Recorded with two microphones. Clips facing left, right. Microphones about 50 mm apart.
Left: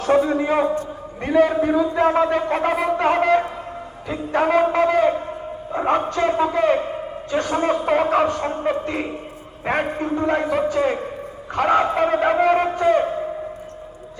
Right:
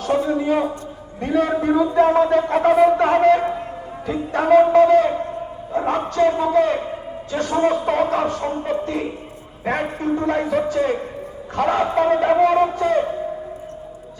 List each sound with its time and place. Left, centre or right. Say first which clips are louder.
0.1 s a man's voice: left 2 dB; left
1.2 s speech: left 3 dB; centre
1.5 s a man's voice: right 1 dB; centre
2.0 s speech: right 2 dB; centre
7.5 s speech: right 2 dB; centre